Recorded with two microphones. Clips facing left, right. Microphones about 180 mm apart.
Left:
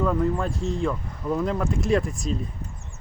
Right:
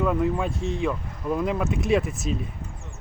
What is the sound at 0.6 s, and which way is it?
Speech, 20° right (ahead or behind).